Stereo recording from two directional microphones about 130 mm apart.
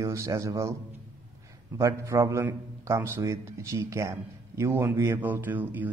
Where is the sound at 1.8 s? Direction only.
25° right (ahead or behind).